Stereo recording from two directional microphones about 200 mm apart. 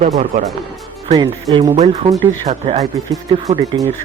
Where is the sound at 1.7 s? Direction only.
35° right (ahead or behind).